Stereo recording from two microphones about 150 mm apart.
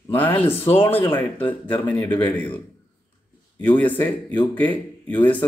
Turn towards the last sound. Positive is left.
turn(degrees=10)  # may be behind; listen again after turning